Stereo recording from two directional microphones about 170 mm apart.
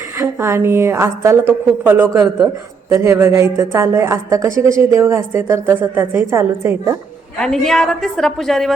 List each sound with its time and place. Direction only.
0.2 s a woman's voice: 15° right (ahead or behind)
7.3 s a woman's voice: centre (ahead or behind)